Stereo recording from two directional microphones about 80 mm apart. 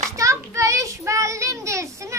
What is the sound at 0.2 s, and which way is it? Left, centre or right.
Child singing, right.